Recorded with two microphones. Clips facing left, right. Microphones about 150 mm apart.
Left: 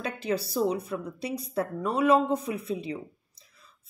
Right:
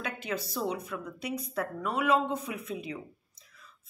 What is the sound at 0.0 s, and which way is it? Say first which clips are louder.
A woman's voice: left 5 dB; 35° left (ahead or behind).